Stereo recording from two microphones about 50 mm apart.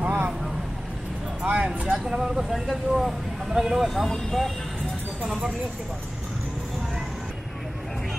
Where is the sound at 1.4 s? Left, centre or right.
Right.